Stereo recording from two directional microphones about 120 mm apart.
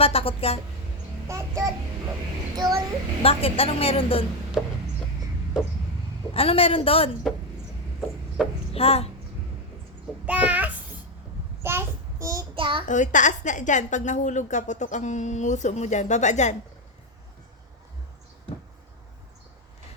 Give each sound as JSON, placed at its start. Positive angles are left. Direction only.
{"t": 0.0, "sound": "a woman's voice", "side_deg": 55}
{"t": 1.3, "sound": "a child's voice", "side_deg": -25}
{"t": 3.2, "sound": "a woman's voice", "side_deg": 55}
{"t": 6.3, "sound": "a woman's voice", "side_deg": 50}
{"t": 8.4, "sound": "a child's voice", "side_deg": -5}
{"t": 8.7, "sound": "a child's voice", "side_deg": 55}
{"t": 10.2, "sound": "a child's voice", "side_deg": -10}
{"t": 11.6, "sound": "child singing", "side_deg": -20}
{"t": 12.5, "sound": "a child's voice", "side_deg": -45}
{"t": 12.9, "sound": "a woman's voice", "side_deg": 90}